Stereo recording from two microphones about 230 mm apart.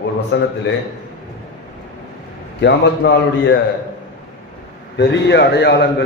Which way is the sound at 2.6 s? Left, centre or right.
Left.